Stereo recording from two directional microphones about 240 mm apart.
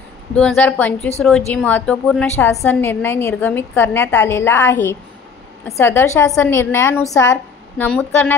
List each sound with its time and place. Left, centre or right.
0.3 s a woman's voice: centre